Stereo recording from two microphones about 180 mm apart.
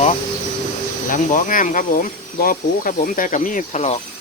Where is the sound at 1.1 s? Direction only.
45° left (ahead or behind).